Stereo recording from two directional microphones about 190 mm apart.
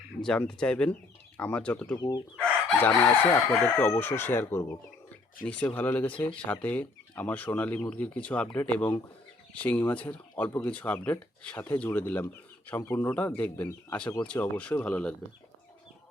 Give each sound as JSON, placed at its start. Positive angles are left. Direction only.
{"t": 0.2, "sound": "speech", "side_deg": 5}
{"t": 2.0, "sound": "speech", "side_deg": 20}